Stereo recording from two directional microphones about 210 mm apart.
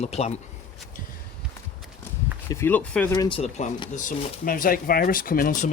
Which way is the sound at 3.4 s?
30° left (ahead or behind).